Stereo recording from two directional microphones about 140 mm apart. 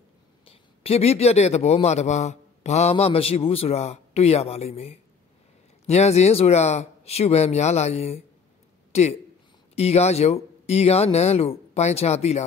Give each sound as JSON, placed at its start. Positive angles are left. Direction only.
{"t": 0.5, "sound": "a man's voice", "side_deg": 45}